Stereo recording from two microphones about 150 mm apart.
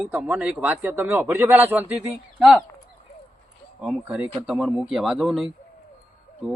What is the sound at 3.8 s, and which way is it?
A man's voice, 10° right (ahead or behind).